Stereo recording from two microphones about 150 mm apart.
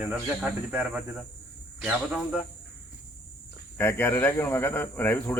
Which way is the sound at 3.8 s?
15° left (ahead or behind).